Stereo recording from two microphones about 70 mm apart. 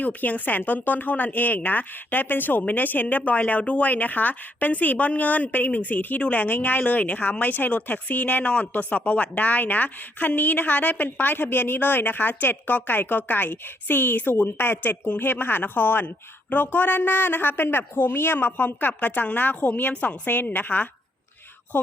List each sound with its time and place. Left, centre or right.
0.0 s speech: left